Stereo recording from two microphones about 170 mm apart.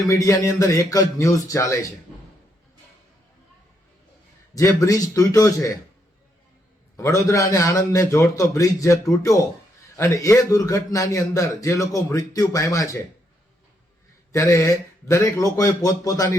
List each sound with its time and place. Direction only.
0.1 s a man's voice: 20° left (ahead or behind)
4.5 s a man's voice: 20° left (ahead or behind)
6.9 s a man's voice: 20° left (ahead or behind)
10.0 s a man's voice: 20° left (ahead or behind)
14.3 s a man's voice: 20° left (ahead or behind)